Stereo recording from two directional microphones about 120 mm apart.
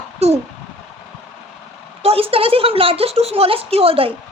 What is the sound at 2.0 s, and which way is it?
A woman's voice, 55° right (ahead or behind).